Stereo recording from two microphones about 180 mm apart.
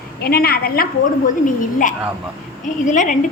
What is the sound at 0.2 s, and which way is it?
Speech, 55° left (ahead or behind).